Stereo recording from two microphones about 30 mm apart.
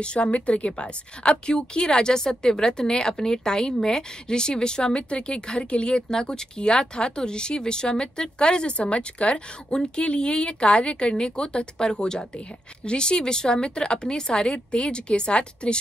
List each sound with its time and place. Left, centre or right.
0.0 s speech: left
8.7 s a woman's voice: left